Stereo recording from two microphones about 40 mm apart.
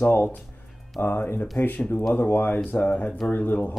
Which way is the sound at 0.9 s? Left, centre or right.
Left.